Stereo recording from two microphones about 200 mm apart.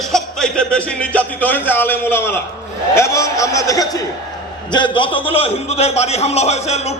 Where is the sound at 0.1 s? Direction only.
5° left (ahead or behind).